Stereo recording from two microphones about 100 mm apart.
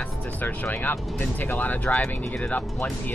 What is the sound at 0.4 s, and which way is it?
Speech, 15° left (ahead or behind).